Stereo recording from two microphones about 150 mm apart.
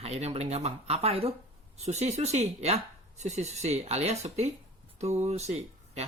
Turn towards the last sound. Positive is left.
turn(degrees=-45)  # may be behind; listen again after turning